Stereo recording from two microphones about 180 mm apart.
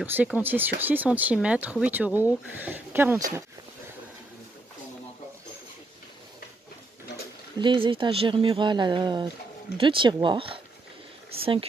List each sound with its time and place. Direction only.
0.0 s speech: 10° right (ahead or behind)
7.5 s speech: 25° right (ahead or behind)